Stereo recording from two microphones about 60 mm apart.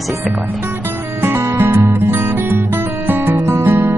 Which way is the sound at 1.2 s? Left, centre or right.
Right.